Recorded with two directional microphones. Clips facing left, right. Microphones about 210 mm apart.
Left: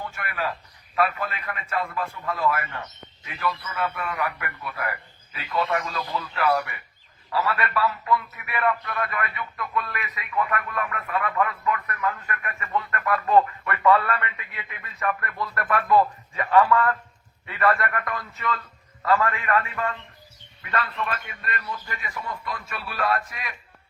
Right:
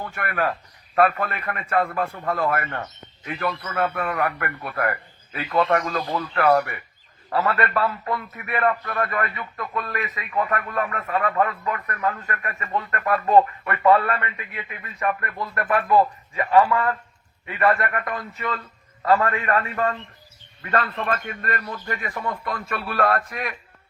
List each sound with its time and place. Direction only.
0.0 s a man's voice: 55° right (ahead or behind)
8.8 s a man's voice: 40° right (ahead or behind)
9.7 s a man's voice: 35° right (ahead or behind)
15.0 s a man's voice: 15° right (ahead or behind)
17.7 s a man's voice: 30° right (ahead or behind); by 23.6 s 55° right (ahead or behind)